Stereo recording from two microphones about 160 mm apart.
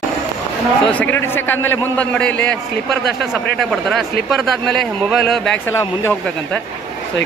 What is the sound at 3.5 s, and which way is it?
Speech, centre (ahead or behind).